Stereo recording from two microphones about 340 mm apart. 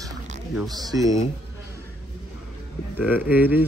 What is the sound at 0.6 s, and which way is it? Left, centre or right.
Speech, centre.